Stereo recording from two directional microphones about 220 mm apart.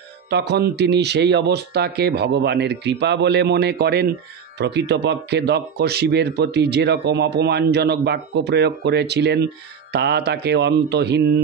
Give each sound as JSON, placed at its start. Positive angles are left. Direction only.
{"t": 0.3, "sound": "speech", "side_deg": -50}